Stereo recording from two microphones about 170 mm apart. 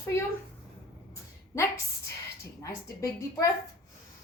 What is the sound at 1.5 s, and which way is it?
A woman's voice, 15° left (ahead or behind).